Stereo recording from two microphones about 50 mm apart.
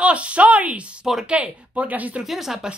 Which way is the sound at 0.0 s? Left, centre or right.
Right.